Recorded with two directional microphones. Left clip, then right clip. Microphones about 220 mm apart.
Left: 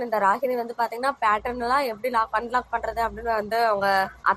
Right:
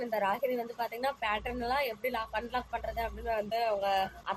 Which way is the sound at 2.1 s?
15° left (ahead or behind).